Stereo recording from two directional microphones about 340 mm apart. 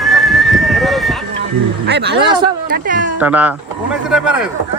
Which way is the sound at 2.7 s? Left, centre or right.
Right.